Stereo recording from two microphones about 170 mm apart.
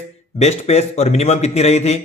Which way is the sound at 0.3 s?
40° left (ahead or behind).